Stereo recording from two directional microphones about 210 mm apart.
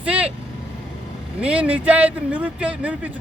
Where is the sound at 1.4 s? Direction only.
5° right (ahead or behind).